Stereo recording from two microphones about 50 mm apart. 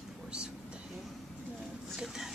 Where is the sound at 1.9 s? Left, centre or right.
Centre.